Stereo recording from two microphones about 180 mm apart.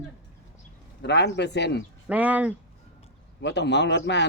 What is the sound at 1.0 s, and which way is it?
Speech, 70° left (ahead or behind).